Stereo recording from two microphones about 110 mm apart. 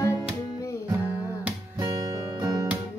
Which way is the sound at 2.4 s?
40° right (ahead or behind).